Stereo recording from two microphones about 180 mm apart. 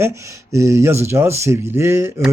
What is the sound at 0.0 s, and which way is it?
A man's voice, 15° right (ahead or behind).